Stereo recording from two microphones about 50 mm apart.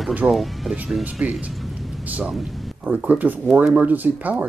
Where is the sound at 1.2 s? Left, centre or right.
Right.